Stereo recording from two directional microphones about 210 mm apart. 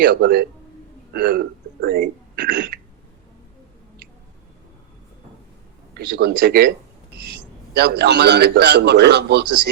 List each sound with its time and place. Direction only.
0.0 s a man's voice: 50° right (ahead or behind)
6.1 s a man's voice: 50° right (ahead or behind)